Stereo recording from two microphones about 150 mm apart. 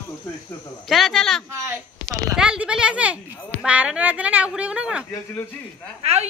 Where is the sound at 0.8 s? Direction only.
Centre (ahead or behind).